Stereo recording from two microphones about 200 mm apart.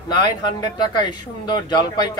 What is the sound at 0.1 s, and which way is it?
Speech, 20° left (ahead or behind).